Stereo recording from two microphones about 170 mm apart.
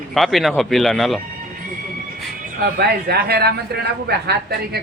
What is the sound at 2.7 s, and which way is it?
Speech, 65° right (ahead or behind).